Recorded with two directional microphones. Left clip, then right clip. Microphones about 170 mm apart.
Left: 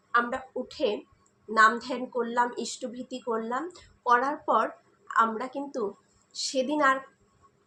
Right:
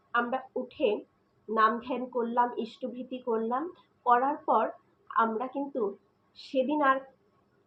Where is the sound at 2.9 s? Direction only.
25° left (ahead or behind); by 4.6 s 40° left (ahead or behind).